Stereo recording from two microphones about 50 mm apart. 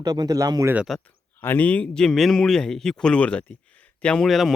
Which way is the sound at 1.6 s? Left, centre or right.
Left.